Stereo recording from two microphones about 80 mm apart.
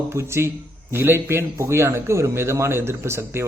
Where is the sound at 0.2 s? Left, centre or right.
Right.